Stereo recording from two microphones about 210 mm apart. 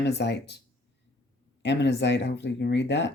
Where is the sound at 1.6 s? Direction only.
55° left (ahead or behind).